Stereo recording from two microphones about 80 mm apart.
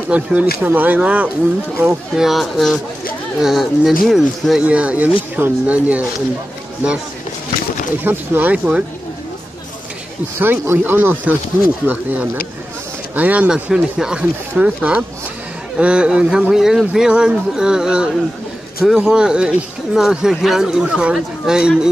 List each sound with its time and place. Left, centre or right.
0.1 s speech: centre
2.1 s speech: centre
4.6 s speech: centre
8.0 s speech: right
10.4 s speech: right